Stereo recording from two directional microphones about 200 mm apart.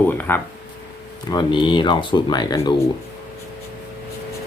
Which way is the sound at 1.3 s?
20° left (ahead or behind).